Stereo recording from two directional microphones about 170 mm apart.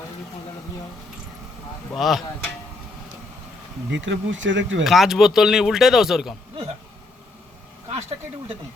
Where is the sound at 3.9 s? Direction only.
90° right.